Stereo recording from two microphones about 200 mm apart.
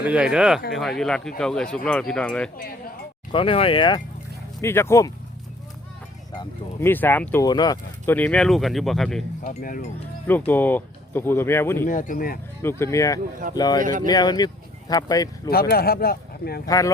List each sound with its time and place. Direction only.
0.0 s speech: 5° right (ahead or behind)
3.3 s speech: 25° left (ahead or behind)
4.6 s speech: 10° left (ahead or behind)
6.4 s speech: 10° left (ahead or behind)
7.4 s speech: 20° left (ahead or behind); by 9.2 s centre (ahead or behind)
9.4 s speech: 40° left (ahead or behind)
10.2 s speech: 10° left (ahead or behind)
11.9 s speech: 40° left (ahead or behind)
12.6 s speech: 15° left (ahead or behind)
13.8 s speech: 40° right (ahead or behind)
14.1 s speech: 20° left (ahead or behind)
15.4 s speech: 50° left (ahead or behind)
16.6 s speech: 15° left (ahead or behind)